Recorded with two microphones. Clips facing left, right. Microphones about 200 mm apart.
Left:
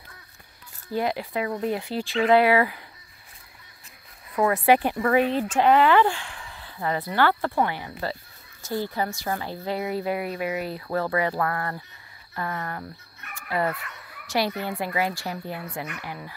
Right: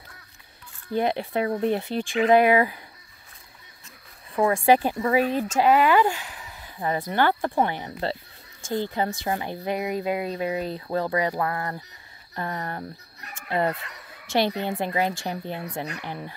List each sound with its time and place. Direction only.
0.9 s speech: 25° right (ahead or behind)
4.5 s speech: 25° right (ahead or behind)
5.6 s speech: 10° right (ahead or behind)
12.4 s speech: 30° right (ahead or behind)